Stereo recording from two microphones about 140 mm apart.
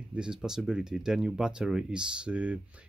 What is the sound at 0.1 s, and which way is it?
Speech, 5° right (ahead or behind).